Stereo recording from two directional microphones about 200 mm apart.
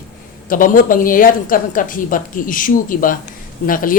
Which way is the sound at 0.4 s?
45° left (ahead or behind).